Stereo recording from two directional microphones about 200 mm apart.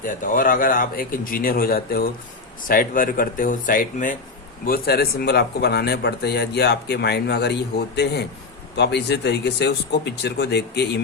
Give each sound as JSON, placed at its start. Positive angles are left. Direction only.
{"t": 0.0, "sound": "speech", "side_deg": 40}